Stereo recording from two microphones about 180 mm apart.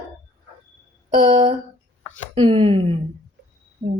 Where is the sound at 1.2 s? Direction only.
30° right (ahead or behind).